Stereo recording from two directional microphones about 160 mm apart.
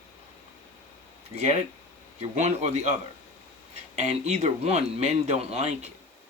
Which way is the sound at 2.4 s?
45° right (ahead or behind).